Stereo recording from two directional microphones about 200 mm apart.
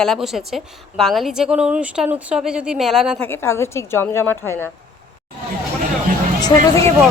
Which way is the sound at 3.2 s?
10° left (ahead or behind).